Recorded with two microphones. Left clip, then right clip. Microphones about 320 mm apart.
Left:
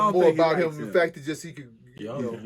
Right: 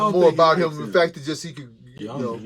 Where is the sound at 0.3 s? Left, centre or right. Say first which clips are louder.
Right 5 dB; centre.